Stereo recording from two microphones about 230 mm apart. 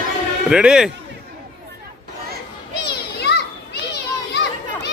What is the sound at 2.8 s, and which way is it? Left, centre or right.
Children playing, left.